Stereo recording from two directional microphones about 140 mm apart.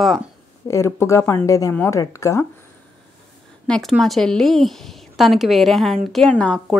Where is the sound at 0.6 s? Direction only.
20° left (ahead or behind).